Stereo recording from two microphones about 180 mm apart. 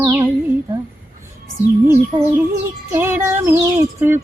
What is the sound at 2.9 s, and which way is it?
Music, 15° right (ahead or behind).